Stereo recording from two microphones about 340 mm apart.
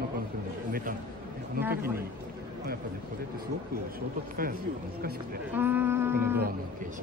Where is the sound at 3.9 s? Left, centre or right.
Right.